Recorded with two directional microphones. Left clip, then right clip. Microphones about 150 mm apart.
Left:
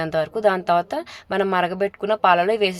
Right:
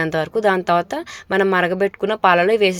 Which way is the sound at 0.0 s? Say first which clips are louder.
Right 2 dB; 20° right (ahead or behind).